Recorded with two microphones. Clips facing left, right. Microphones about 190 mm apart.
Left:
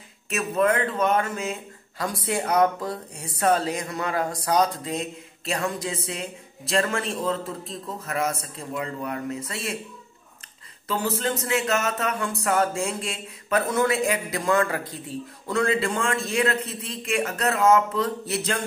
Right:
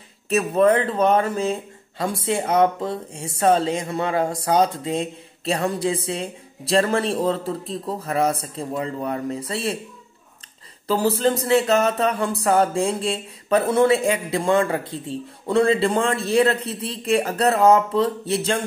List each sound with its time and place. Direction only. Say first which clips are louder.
0.3 s speech: right 6 dB; 30° right (ahead or behind)
10.9 s speech: right 7 dB; 35° right (ahead or behind)